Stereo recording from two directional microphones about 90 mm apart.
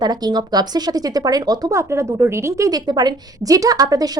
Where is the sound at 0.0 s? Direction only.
50° right (ahead or behind).